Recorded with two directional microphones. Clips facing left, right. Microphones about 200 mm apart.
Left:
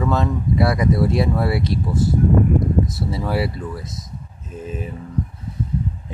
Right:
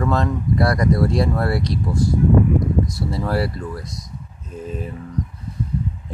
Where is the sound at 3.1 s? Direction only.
Centre (ahead or behind).